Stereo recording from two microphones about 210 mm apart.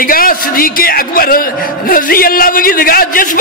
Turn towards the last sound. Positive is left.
turn(degrees=40)  # may be behind; listen again after turning